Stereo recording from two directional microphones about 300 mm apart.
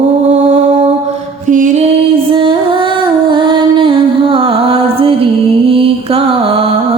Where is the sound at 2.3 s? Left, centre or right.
Centre.